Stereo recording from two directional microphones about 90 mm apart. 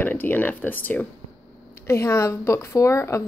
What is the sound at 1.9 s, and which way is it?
Speech, 30° left (ahead or behind).